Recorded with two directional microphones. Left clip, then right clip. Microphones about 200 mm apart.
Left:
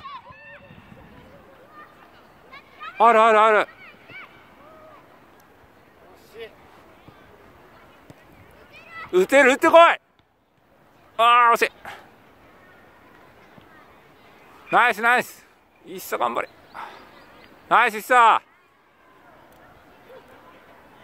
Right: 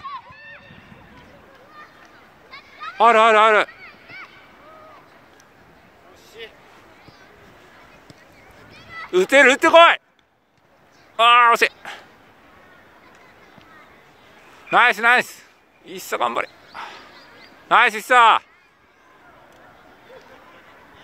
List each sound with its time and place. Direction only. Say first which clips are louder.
3.0 s speech: right 2 dB; centre (ahead or behind)
6.4 s a sound: right 1 dB; 40° left (ahead or behind)
9.1 s speech: right 2 dB; 5° left (ahead or behind)
11.1 s speech: right 3 dB; centre (ahead or behind)
14.7 s speech: right 3 dB; centre (ahead or behind)